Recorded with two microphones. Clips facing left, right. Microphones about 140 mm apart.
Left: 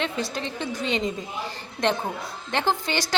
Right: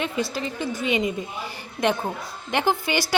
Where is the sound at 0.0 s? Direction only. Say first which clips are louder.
Right 2 dB; 5° right (ahead or behind).